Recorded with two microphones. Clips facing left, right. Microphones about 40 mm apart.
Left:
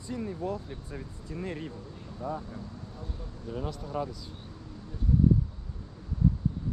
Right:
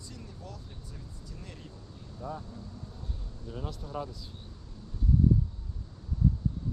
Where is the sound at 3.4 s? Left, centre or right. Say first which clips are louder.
Left 4 dB; centre.